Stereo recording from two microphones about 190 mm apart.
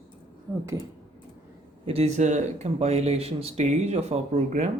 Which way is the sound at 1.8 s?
35° right (ahead or behind).